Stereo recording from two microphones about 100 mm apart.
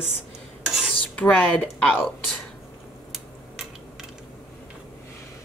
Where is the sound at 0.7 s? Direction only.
Centre (ahead or behind).